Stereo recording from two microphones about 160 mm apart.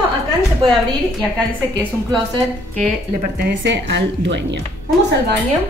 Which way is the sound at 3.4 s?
90° right.